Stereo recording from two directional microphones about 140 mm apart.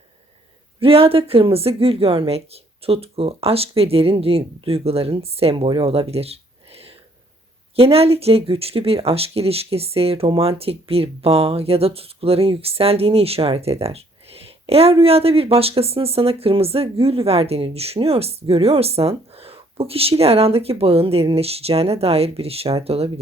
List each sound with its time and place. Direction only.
0.8 s speech: 40° right (ahead or behind)